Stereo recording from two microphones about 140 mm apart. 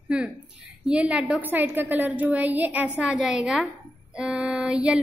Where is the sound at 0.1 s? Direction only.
5° right (ahead or behind).